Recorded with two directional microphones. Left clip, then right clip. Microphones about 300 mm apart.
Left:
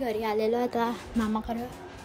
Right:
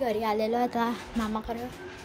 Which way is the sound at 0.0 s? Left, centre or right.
Centre.